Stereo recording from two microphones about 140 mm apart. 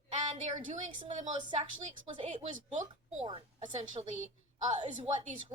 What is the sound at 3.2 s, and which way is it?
Speech, 35° right (ahead or behind).